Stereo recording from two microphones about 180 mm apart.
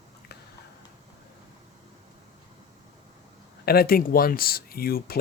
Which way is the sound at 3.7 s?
55° left (ahead or behind).